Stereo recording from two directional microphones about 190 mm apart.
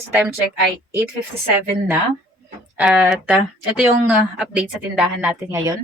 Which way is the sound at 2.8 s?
Centre (ahead or behind).